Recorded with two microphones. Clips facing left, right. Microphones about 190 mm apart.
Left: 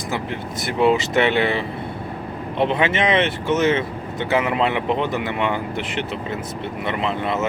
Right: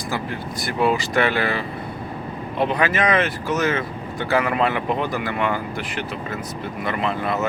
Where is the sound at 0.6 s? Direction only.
25° left (ahead or behind).